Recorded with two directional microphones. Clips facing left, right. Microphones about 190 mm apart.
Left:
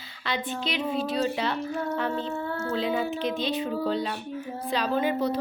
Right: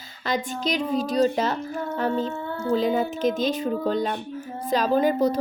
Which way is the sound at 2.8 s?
45° right (ahead or behind).